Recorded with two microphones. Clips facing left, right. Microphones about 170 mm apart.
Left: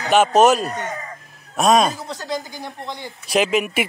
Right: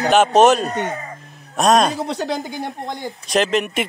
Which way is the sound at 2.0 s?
65° right (ahead or behind).